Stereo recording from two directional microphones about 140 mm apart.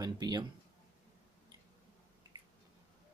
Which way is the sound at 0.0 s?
30° right (ahead or behind).